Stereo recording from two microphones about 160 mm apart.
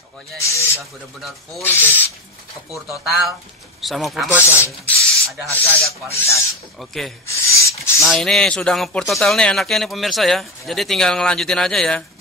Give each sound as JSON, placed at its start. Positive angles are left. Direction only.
{"t": 0.4, "sound": "speech", "side_deg": 20}
{"t": 2.7, "sound": "speech", "side_deg": 0}
{"t": 4.5, "sound": "speech", "side_deg": 15}
{"t": 5.0, "sound": "rub", "side_deg": 5}
{"t": 6.8, "sound": "speech", "side_deg": 0}
{"t": 7.2, "sound": "filing", "side_deg": 20}
{"t": 8.0, "sound": "speech", "side_deg": 0}